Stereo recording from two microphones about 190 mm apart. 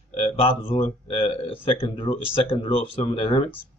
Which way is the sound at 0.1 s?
30° left (ahead or behind).